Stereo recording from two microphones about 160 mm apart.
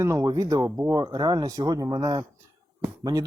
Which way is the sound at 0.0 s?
20° right (ahead or behind).